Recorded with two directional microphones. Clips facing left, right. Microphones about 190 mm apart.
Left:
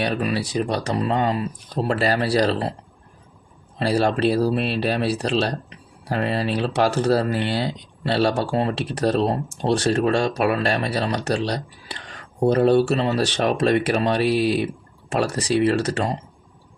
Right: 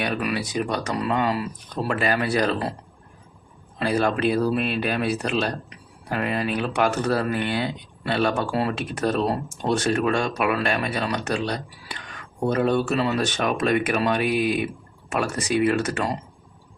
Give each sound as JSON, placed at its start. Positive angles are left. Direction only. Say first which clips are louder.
{"t": 0.0, "sound": "speech", "louder": "left 3 dB", "side_deg": 30}
{"t": 3.8, "sound": "speech", "louder": "left 2 dB", "side_deg": 30}